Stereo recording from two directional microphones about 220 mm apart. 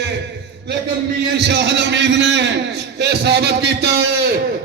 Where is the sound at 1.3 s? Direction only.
50° right (ahead or behind).